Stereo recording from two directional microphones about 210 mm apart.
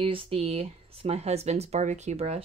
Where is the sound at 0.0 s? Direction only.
25° right (ahead or behind).